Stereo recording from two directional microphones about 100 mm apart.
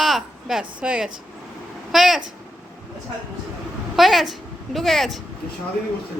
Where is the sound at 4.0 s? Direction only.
Centre (ahead or behind).